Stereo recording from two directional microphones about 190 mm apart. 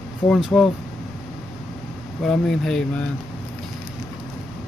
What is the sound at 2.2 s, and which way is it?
Speech, centre (ahead or behind).